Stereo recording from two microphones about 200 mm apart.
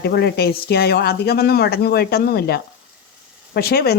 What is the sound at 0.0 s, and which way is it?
Speech, 55° left (ahead or behind).